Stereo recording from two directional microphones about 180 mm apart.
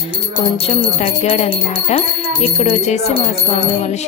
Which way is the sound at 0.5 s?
30° left (ahead or behind).